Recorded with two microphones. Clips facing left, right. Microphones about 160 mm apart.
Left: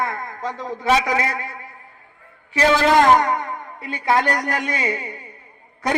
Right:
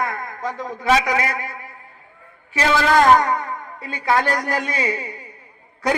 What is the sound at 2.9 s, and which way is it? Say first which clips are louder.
A man's voice: right 3 dB; 20° left (ahead or behind).